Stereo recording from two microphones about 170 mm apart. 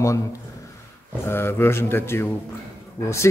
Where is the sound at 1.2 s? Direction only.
15° left (ahead or behind).